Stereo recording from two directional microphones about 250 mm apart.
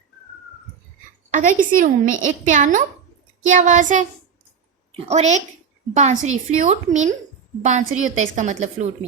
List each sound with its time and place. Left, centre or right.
1.3 s a woman's voice: right
2.0 s a child's voice: right
2.5 s a woman's voice: right
5.0 s a woman's voice: right